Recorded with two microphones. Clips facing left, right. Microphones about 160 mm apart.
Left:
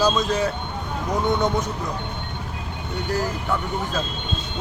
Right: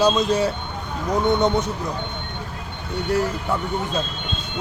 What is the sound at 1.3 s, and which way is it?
Speech, 25° right (ahead or behind).